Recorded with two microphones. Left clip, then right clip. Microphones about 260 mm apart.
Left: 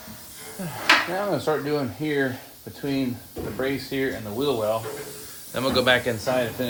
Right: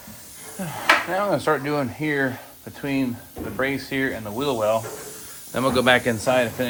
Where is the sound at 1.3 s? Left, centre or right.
Right.